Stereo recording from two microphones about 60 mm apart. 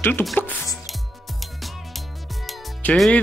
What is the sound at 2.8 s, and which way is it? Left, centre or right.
Speech, left.